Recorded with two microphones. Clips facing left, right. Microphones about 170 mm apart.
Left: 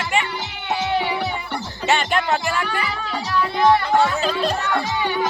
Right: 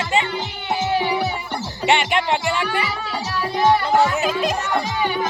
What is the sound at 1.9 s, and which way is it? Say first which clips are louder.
Speech: right 1 dB; 20° right (ahead or behind).